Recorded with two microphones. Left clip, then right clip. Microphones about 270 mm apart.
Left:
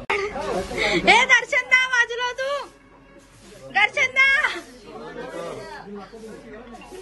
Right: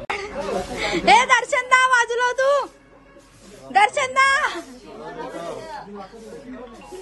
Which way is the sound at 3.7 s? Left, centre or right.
Centre.